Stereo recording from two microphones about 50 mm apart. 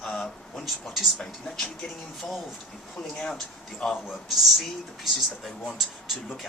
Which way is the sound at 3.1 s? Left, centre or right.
Centre.